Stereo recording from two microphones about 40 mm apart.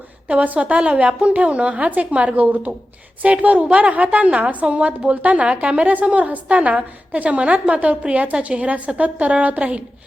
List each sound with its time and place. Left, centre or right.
0.3 s a woman's voice: right
2.3 s speech: right
3.4 s a woman's voice: right
4.4 s a woman's voice: right